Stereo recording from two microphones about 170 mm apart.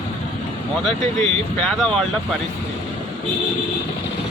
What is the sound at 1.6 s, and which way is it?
Speech, 5° left (ahead or behind).